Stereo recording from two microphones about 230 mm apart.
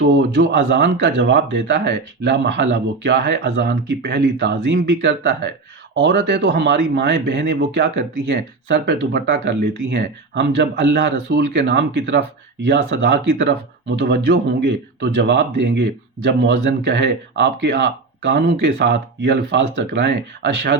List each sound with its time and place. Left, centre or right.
0.0 s speech: right